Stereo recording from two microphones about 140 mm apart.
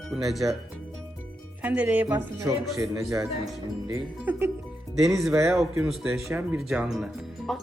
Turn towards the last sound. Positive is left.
turn(degrees=0)  # may be behind; listen again after turning